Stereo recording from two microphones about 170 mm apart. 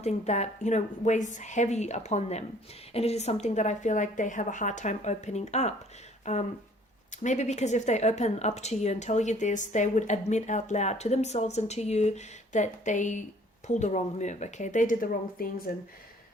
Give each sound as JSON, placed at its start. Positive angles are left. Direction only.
{"t": 0.0, "sound": "speech", "side_deg": 40}